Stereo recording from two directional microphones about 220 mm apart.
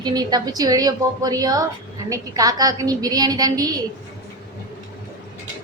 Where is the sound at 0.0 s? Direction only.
20° right (ahead or behind).